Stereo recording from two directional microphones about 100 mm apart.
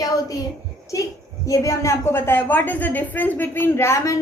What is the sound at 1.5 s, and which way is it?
A woman's voice, 30° left (ahead or behind).